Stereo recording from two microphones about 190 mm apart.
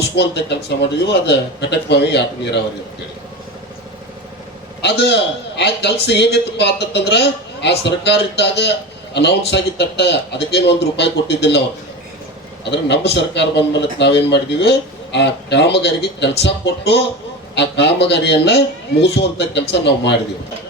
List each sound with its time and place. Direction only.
0.2 s a man's voice: 65° left (ahead or behind)
4.8 s a man's voice: 60° left (ahead or behind)
12.7 s a man's voice: 65° left (ahead or behind)